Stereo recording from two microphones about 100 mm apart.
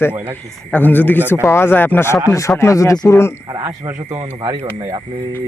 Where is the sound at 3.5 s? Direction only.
30° right (ahead or behind).